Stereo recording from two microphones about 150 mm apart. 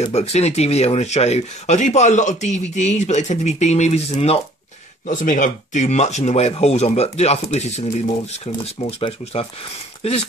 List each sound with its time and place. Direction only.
0.0 s speech: 45° left (ahead or behind)
5.0 s speech: 60° left (ahead or behind); by 10.2 s 40° left (ahead or behind)